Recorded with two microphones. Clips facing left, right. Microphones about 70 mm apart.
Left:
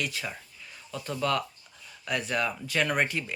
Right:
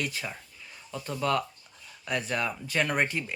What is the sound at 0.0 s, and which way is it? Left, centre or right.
Speech, right.